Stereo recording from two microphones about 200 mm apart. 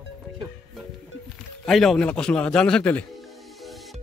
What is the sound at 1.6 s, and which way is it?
Speech, centre (ahead or behind).